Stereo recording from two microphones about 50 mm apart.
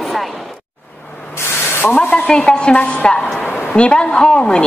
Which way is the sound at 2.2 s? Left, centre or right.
Centre.